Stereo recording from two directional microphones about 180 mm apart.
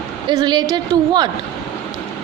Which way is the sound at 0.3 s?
25° right (ahead or behind).